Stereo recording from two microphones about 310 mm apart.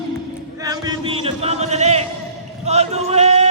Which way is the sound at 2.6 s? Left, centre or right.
Right.